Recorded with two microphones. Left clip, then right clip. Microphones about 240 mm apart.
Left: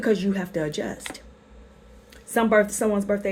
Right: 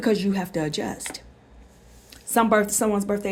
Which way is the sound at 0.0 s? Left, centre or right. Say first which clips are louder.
Even; right.